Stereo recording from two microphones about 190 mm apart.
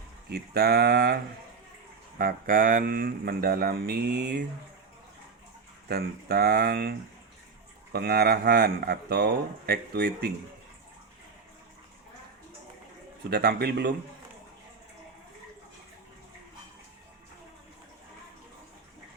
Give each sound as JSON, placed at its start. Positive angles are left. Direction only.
{"t": 0.3, "sound": "speech", "side_deg": -55}
{"t": 5.9, "sound": "speech", "side_deg": -55}
{"t": 7.9, "sound": "speech", "side_deg": -55}
{"t": 13.3, "sound": "speech", "side_deg": -55}